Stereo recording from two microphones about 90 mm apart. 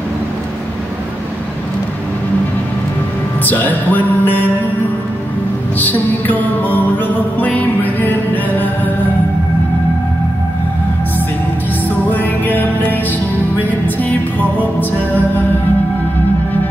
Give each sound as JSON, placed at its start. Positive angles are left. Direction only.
{"t": 3.4, "sound": "music", "side_deg": 20}
{"t": 5.8, "sound": "music", "side_deg": 20}
{"t": 12.1, "sound": "music", "side_deg": 20}